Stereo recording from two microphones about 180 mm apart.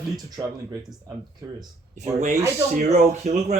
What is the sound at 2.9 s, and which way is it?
Speech, 40° right (ahead or behind).